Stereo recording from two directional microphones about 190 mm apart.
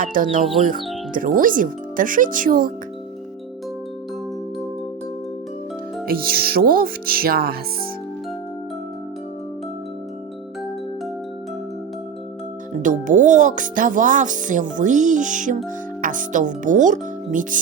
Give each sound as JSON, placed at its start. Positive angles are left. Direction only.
{"t": 0.0, "sound": "speech", "side_deg": -45}
{"t": 6.1, "sound": "speech", "side_deg": -50}
{"t": 12.7, "sound": "speech", "side_deg": -40}